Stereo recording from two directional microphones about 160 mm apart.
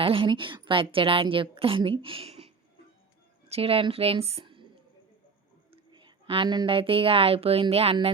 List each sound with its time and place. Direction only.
0.0 s a woman's voice: 35° right (ahead or behind)
3.5 s speech: 35° right (ahead or behind)
5.7 s a woman's voice: 30° right (ahead or behind)